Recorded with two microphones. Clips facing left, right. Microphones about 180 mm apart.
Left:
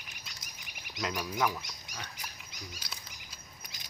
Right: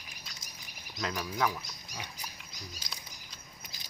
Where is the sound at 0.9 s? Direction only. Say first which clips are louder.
Even; 5° left (ahead or behind).